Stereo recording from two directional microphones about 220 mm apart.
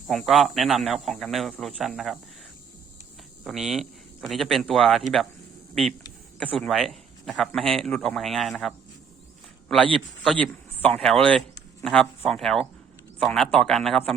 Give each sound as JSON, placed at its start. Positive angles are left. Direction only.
{"t": 0.1, "sound": "a man's voice", "side_deg": 0}
{"t": 3.4, "sound": "speech", "side_deg": 0}
{"t": 6.6, "sound": "a man's voice", "side_deg": 0}